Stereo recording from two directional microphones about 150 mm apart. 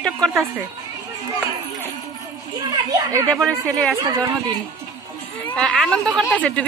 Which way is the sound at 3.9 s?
25° right (ahead or behind).